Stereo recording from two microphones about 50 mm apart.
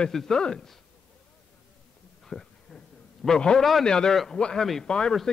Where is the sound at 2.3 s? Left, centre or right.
Centre.